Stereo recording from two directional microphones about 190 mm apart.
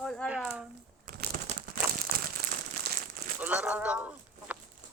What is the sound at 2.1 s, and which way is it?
Crumpling, 50° right (ahead or behind).